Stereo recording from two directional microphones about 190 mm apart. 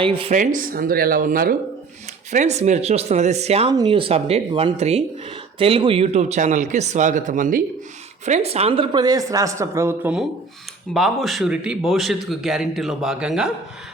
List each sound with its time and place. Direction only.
0.0 s a woman's voice: 30° right (ahead or behind)
0.3 s speech: 45° right (ahead or behind)
2.3 s speech: 35° right (ahead or behind)
3.7 s a woman's voice: 20° right (ahead or behind); by 13.5 s 5° right (ahead or behind)